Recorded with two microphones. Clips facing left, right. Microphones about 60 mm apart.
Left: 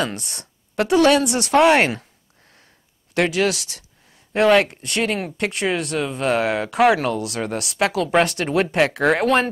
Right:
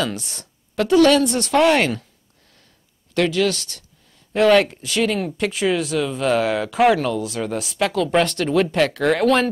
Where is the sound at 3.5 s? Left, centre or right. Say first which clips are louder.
Even; centre.